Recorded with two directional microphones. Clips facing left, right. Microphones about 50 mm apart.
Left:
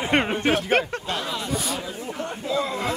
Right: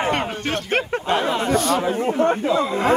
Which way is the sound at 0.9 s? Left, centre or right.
Right.